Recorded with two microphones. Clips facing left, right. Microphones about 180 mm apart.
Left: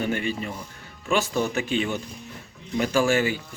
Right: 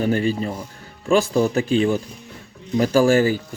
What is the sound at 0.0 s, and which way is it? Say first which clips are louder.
Speech: right 7 dB; 35° right (ahead or behind).